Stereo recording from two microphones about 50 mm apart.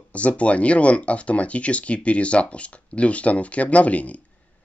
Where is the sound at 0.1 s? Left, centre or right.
Left.